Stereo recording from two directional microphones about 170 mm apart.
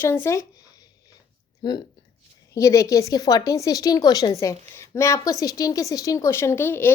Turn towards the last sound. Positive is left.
turn(degrees=15)  # may be behind; listen again after turning